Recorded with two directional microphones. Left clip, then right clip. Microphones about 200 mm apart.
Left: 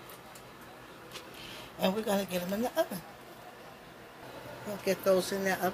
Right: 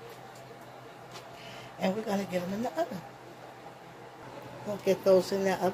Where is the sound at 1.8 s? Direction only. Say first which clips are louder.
Left 1 dB; 40° left (ahead or behind).